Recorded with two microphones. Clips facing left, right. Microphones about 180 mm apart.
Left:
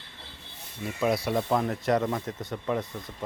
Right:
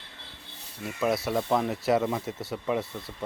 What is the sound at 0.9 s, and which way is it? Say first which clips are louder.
Speech: left 1 dB; centre (ahead or behind).